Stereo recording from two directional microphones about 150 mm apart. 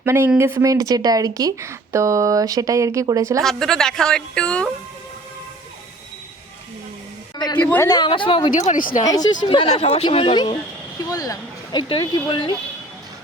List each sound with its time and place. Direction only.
0.0 s speech: 15° right (ahead or behind)
3.4 s a woman's voice: 5° left (ahead or behind)
7.5 s a woman's voice: 10° left (ahead or behind)
7.9 s speech: 30° left (ahead or behind)
8.5 s speech: 55° left (ahead or behind)
9.0 s speech: 25° left (ahead or behind)
9.5 s speech: 40° left (ahead or behind)
11.1 s speech: 25° left (ahead or behind)